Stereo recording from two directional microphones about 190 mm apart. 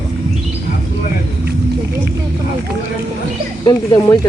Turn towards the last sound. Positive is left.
turn(degrees=20)  # may be behind; listen again after turning